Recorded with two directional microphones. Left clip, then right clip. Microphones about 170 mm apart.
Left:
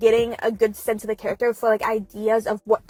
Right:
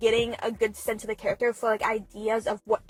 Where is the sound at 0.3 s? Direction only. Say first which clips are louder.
Left 6 dB; 20° left (ahead or behind).